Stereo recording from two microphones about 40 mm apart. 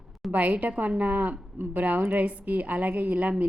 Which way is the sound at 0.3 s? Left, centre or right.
Right.